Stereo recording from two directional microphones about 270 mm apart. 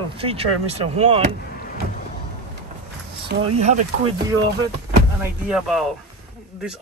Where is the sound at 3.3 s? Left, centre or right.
Right.